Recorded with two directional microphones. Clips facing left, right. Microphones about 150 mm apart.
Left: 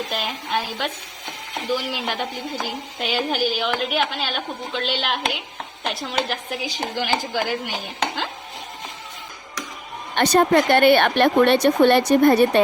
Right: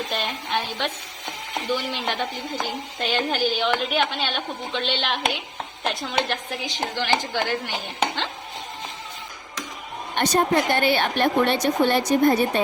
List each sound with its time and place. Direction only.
0.1 s a woman's voice: 5° left (ahead or behind)
10.2 s a woman's voice: 75° left (ahead or behind)